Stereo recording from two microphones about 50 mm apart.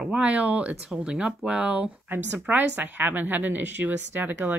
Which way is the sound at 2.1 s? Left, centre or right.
Right.